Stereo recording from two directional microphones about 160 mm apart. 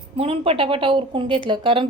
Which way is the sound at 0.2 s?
35° right (ahead or behind).